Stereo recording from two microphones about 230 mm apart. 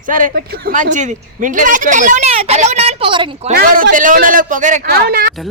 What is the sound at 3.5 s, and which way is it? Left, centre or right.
A man's voice, right.